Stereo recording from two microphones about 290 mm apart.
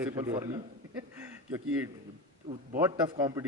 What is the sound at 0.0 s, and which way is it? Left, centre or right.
Speech, centre.